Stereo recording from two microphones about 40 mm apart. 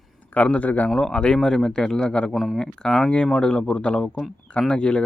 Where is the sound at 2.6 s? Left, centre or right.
Centre.